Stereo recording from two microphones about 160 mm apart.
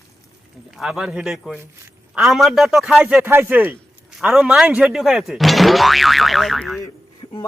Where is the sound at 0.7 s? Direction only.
Centre (ahead or behind).